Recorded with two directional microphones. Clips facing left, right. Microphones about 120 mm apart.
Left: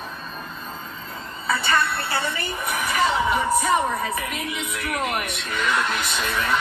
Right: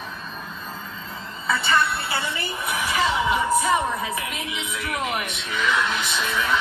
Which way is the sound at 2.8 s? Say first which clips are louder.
Left 1 dB; 45° left (ahead or behind).